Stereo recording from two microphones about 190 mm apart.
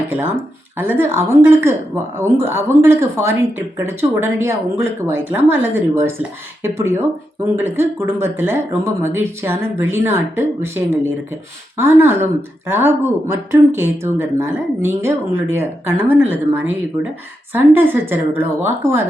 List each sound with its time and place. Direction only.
0.1 s speech: 10° right (ahead or behind)